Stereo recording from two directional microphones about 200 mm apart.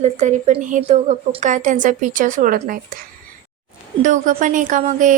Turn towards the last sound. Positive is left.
turn(degrees=-40)  # may be behind; listen again after turning